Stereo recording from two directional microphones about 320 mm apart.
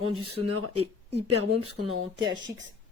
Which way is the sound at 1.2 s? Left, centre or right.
Right.